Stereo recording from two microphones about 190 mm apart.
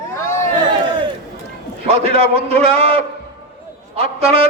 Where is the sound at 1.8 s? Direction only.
30° right (ahead or behind).